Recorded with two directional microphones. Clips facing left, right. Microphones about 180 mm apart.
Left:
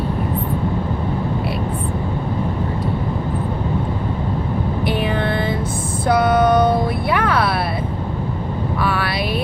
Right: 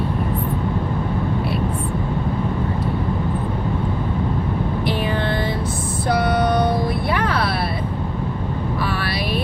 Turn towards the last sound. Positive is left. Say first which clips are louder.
# left 3 dB
turn(degrees=55)  # may be behind; listen again after turning